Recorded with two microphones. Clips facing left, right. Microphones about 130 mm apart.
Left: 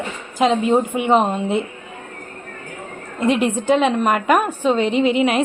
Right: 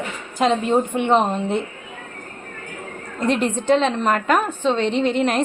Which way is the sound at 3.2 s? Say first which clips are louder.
Left 3 dB; 5° left (ahead or behind).